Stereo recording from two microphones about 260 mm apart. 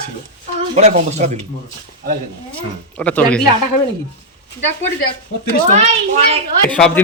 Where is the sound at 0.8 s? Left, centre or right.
Right.